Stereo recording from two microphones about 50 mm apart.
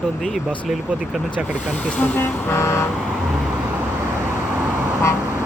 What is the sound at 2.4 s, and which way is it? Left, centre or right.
Vehicle, left.